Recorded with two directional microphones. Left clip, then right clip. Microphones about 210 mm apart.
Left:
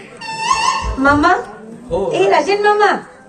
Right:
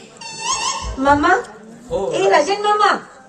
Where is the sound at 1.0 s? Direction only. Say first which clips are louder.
Left 1 dB; 40° right (ahead or behind).